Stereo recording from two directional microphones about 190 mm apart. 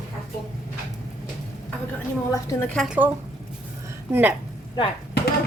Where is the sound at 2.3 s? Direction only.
15° left (ahead or behind); by 3.1 s 5° right (ahead or behind).